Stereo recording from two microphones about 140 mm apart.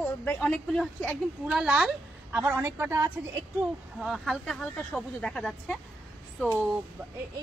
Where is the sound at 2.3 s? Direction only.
15° right (ahead or behind).